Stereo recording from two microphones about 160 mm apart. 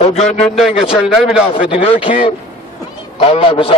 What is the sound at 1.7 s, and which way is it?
Speech, 35° left (ahead or behind).